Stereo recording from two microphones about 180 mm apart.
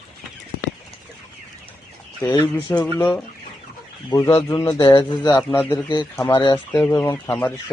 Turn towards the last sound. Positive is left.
turn(degrees=15)  # may be behind; listen again after turning